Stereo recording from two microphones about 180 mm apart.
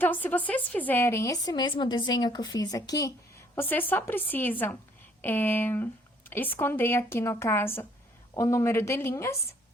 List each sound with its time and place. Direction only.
0.0 s a woman's voice: 10° left (ahead or behind)